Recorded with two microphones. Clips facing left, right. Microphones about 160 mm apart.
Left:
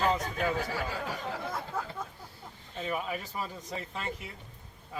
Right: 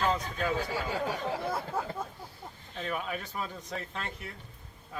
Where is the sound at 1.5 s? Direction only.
30° right (ahead or behind).